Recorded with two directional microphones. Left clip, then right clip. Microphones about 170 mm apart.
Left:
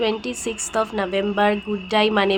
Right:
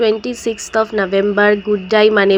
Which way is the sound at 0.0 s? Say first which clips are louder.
Right 8 dB; 25° right (ahead or behind).